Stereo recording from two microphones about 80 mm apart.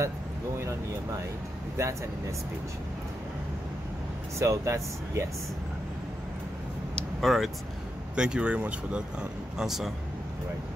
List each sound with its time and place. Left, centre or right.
1.8 s speech: right
4.4 s speech: right
7.2 s speech: centre
8.2 s speech: centre